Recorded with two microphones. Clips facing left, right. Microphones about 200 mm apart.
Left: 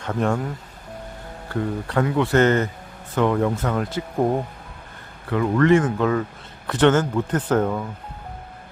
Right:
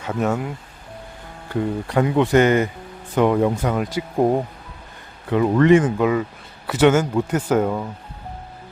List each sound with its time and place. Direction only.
0.0 s speech: 5° right (ahead or behind)
1.5 s speech: 15° right (ahead or behind)
5.3 s speech: 20° right (ahead or behind)